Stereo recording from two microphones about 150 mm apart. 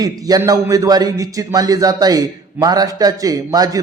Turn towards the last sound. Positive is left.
turn(degrees=-25)  # may be behind; listen again after turning